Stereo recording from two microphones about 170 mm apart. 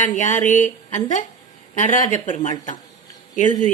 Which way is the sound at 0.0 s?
45° left (ahead or behind).